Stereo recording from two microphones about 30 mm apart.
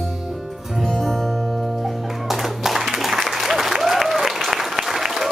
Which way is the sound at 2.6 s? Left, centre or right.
Centre.